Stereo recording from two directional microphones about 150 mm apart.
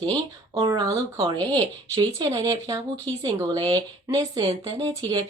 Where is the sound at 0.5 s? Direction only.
30° right (ahead or behind).